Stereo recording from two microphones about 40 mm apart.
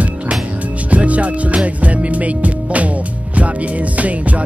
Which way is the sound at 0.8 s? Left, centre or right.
Right.